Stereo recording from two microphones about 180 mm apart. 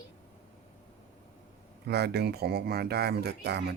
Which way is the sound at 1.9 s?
65° right (ahead or behind).